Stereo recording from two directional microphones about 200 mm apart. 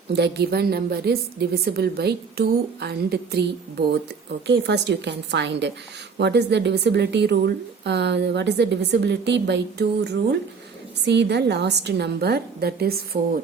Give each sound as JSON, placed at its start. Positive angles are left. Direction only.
{"t": 0.1, "sound": "a woman's voice", "side_deg": -55}